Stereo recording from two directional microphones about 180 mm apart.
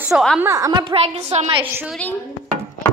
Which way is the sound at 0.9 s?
35° right (ahead or behind).